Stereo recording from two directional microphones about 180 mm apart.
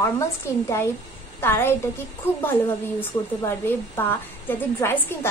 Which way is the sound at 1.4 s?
10° left (ahead or behind).